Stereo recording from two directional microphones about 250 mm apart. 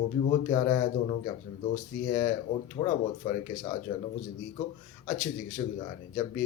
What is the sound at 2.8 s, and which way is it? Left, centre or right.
Speech, left.